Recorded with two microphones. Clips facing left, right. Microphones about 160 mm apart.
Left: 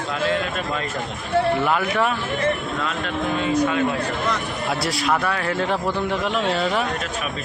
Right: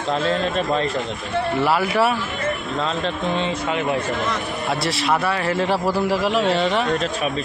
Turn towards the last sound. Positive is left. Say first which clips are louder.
# right 3 dB
turn(degrees=0)  # may be behind; listen again after turning